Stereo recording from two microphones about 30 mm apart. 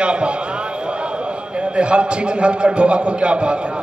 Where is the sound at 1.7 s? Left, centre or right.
Right.